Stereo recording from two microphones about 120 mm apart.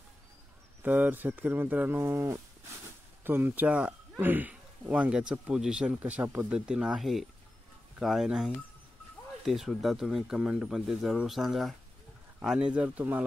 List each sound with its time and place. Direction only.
0.8 s speech: 15° right (ahead or behind)